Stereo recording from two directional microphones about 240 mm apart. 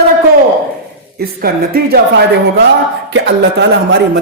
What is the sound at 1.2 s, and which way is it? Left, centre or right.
A woman's voice, right.